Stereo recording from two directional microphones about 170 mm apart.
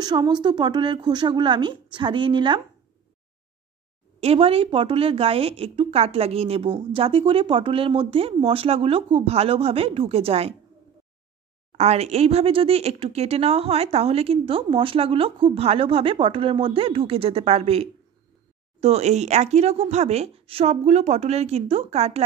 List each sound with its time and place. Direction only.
0.0 s a woman's voice: 25° right (ahead or behind)
4.2 s a woman's voice: 35° right (ahead or behind)
11.7 s a woman's voice: 40° right (ahead or behind)